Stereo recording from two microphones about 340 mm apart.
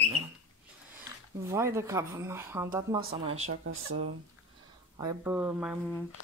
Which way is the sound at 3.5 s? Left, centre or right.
Right.